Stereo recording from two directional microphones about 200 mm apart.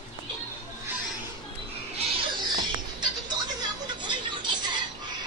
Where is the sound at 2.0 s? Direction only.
25° right (ahead or behind).